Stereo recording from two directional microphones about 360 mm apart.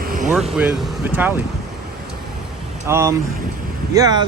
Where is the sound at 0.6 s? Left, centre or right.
Centre.